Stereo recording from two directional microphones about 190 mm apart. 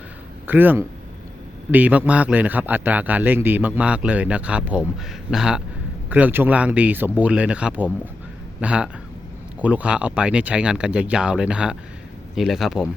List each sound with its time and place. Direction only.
0.4 s a man's voice: 10° right (ahead or behind)